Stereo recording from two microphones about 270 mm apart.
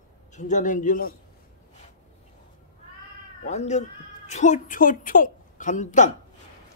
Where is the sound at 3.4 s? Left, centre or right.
Left.